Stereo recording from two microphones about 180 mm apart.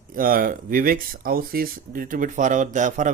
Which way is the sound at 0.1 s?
50° right (ahead or behind).